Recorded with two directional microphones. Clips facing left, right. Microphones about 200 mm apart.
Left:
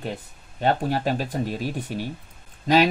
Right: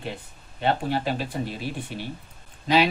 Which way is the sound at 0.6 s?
40° left (ahead or behind).